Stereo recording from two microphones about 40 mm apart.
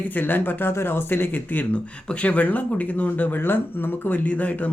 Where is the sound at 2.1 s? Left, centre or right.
Left.